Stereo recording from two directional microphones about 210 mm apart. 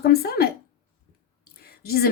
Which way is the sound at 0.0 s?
45° left (ahead or behind).